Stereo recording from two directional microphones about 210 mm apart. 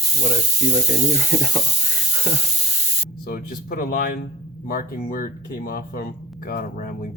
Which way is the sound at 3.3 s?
45° left (ahead or behind).